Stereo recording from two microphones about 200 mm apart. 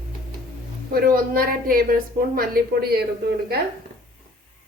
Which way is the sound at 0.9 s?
45° right (ahead or behind).